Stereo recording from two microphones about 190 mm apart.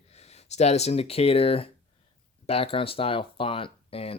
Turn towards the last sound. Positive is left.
turn(degrees=30)  # may be behind; listen again after turning